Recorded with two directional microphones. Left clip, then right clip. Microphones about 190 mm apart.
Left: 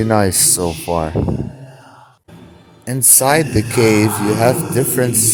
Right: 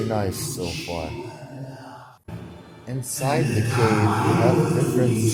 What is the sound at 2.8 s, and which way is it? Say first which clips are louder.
Speech: left 12 dB; 60° left (ahead or behind).